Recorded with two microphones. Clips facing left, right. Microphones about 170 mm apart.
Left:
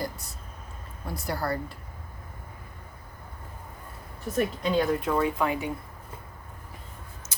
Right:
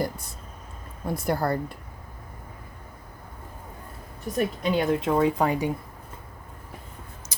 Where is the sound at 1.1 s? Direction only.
50° right (ahead or behind).